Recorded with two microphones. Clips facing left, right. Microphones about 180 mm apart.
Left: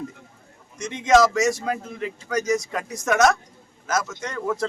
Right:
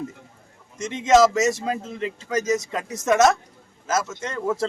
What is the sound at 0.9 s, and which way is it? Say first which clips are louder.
A man's voice: right 1 dB; 25° right (ahead or behind).